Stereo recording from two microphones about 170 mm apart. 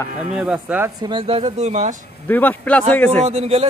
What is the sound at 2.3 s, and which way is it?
Speech, 10° left (ahead or behind).